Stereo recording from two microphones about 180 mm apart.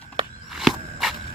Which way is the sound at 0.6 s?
Centre (ahead or behind).